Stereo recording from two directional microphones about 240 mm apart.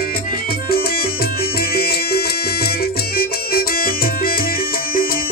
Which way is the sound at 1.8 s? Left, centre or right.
Left.